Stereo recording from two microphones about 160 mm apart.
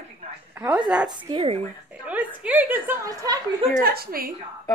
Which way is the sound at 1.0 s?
25° right (ahead or behind).